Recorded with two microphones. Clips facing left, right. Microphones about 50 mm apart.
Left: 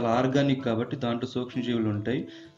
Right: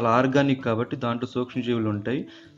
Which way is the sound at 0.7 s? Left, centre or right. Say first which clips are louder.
Right 2 dB; right.